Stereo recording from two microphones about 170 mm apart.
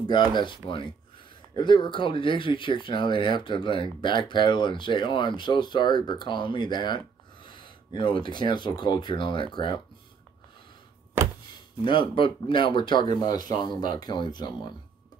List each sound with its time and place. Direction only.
0.0 s speech: 25° left (ahead or behind)
11.8 s speech: 30° left (ahead or behind)